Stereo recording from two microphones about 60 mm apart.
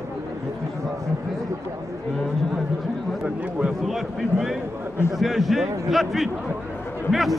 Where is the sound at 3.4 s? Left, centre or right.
Right.